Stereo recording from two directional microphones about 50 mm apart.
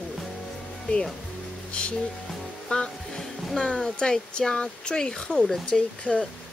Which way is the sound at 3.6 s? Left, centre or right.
Centre.